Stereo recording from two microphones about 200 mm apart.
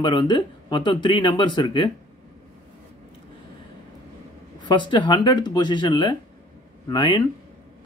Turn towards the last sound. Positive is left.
turn(degrees=20)  # may be behind; listen again after turning